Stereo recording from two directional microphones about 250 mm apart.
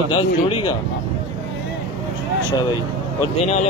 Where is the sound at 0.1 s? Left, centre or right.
Left.